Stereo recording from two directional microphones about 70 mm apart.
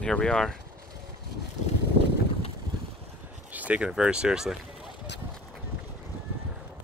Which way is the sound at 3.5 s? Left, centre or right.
Right.